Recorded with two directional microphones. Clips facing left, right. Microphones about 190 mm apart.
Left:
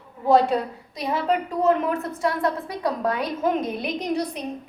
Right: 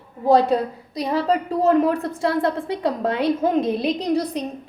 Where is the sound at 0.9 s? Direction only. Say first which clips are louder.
Right 3 dB; 35° right (ahead or behind).